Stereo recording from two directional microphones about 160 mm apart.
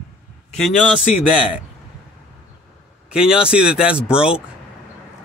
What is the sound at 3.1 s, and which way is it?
Speech, 5° right (ahead or behind).